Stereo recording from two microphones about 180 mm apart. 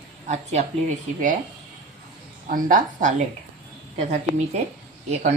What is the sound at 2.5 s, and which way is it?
A woman's voice, 50° right (ahead or behind).